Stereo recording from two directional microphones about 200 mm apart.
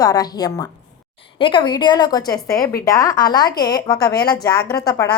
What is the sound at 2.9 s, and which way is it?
A woman's voice, 15° left (ahead or behind).